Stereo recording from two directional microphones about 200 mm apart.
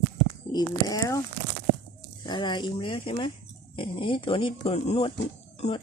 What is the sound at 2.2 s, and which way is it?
Speech, 20° left (ahead or behind).